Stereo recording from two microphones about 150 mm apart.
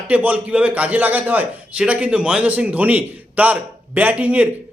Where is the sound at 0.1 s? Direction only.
10° right (ahead or behind).